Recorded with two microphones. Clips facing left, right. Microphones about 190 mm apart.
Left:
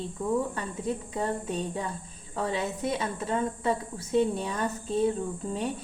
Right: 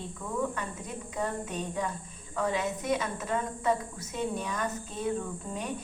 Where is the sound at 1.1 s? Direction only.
30° left (ahead or behind).